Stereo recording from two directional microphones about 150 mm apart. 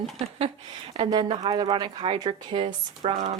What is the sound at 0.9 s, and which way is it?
Speech, 35° right (ahead or behind).